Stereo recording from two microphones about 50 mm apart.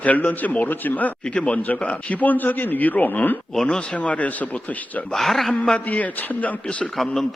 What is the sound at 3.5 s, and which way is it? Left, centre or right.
Speech, centre.